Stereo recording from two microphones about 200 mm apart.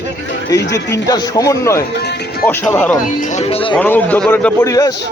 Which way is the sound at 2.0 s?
55° left (ahead or behind).